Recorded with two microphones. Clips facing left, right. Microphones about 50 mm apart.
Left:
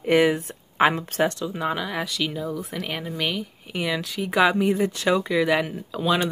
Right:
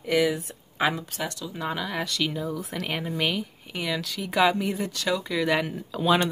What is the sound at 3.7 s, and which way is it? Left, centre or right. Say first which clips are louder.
Speech: left 4 dB; centre.